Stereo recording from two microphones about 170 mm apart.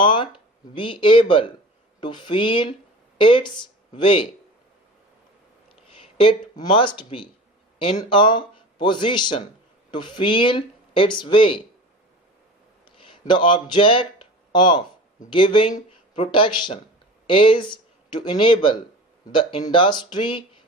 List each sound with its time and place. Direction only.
0.0 s a sound: 30° left (ahead or behind)
0.7 s speech: 30° left (ahead or behind)
6.0 s speech: 30° left (ahead or behind)
13.0 s speech: 30° left (ahead or behind)